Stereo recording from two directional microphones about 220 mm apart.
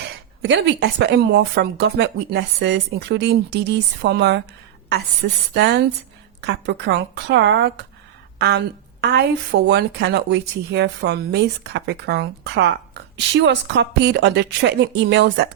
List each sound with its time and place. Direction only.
0.4 s a woman's voice: 50° right (ahead or behind)